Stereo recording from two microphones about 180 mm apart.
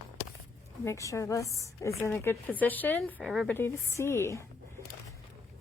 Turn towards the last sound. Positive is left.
turn(degrees=15)  # may be behind; listen again after turning